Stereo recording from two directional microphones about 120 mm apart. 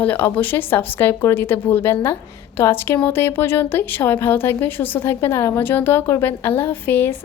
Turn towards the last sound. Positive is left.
turn(degrees=15)  # may be behind; listen again after turning